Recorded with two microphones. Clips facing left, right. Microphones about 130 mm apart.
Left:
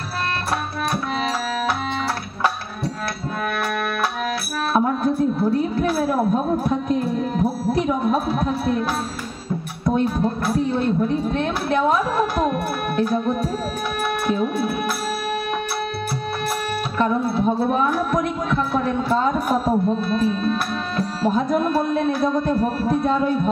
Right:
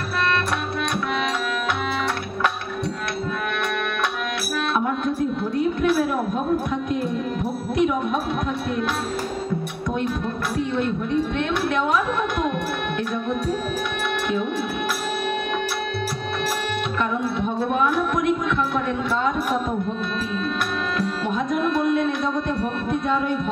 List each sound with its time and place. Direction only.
4.7 s music: 35° left (ahead or behind)
9.8 s music: 35° left (ahead or behind)
17.0 s music: 35° left (ahead or behind)